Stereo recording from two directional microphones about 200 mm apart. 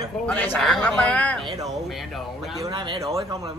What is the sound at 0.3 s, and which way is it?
Speech, 5° left (ahead or behind).